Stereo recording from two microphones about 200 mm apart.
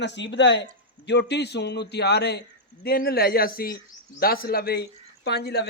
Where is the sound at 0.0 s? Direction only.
60° left (ahead or behind).